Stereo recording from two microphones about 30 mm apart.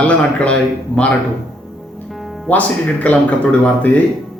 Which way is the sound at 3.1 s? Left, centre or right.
Left.